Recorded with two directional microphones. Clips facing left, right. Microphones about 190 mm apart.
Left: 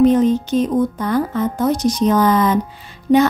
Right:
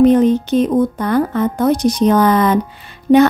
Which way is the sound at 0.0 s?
60° right (ahead or behind).